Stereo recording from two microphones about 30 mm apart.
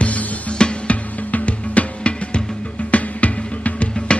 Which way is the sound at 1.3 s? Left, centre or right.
Left.